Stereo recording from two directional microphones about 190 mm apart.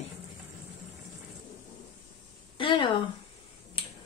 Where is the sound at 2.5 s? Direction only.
25° left (ahead or behind).